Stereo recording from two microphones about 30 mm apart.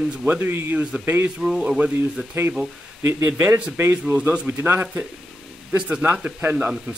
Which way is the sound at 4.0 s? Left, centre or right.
Right.